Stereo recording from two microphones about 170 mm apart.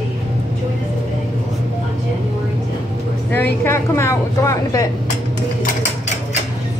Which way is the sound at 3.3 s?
15° left (ahead or behind).